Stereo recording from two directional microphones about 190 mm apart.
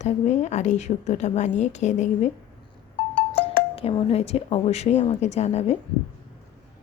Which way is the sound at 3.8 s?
30° left (ahead or behind).